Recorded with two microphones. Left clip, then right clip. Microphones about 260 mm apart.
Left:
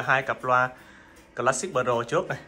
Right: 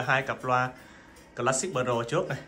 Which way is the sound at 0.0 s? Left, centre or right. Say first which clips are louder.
Left 3 dB; centre.